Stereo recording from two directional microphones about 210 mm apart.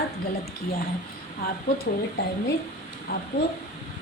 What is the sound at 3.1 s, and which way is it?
Speech, 45° left (ahead or behind).